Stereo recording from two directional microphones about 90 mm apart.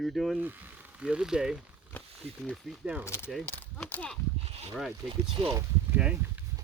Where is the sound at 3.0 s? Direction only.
30° left (ahead or behind).